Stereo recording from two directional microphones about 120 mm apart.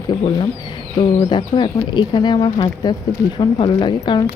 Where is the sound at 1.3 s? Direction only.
40° left (ahead or behind).